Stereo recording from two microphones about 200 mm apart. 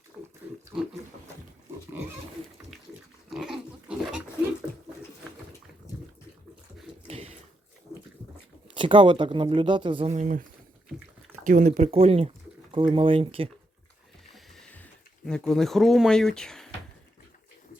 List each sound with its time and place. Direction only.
0.2 s pig: 5° right (ahead or behind)
2.7 s pig: centre (ahead or behind)
7.1 s a sound: 30° right (ahead or behind)
8.7 s speech: 25° right (ahead or behind)
11.4 s speech: 40° right (ahead or behind)
14.3 s music: centre (ahead or behind)
15.3 s speech: centre (ahead or behind)